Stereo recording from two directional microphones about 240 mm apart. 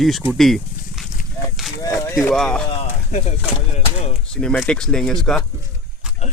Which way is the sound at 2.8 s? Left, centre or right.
Left.